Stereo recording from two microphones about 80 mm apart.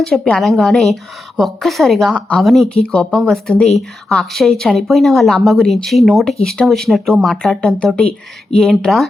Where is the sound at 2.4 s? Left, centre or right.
Centre.